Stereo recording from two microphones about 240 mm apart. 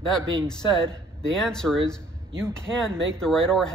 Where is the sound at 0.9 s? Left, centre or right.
Centre.